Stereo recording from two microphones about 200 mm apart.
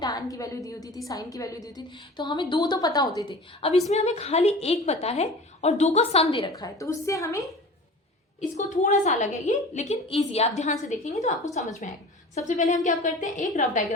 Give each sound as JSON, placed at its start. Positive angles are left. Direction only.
{"t": 0.0, "sound": "a woman's voice", "side_deg": 20}
{"t": 8.4, "sound": "a woman's voice", "side_deg": 35}
{"t": 11.8, "sound": "a sound", "side_deg": 40}
{"t": 12.5, "sound": "a woman's voice", "side_deg": 40}